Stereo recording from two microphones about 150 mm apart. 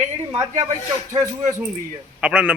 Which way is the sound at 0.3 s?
15° right (ahead or behind).